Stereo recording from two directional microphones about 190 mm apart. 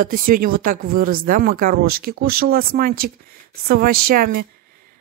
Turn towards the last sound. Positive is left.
turn(degrees=-50)  # may be behind; listen again after turning